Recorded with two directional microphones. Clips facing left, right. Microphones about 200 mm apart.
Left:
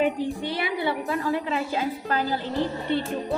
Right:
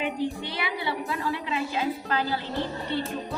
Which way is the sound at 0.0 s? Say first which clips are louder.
Left 4 dB; 45° left (ahead or behind).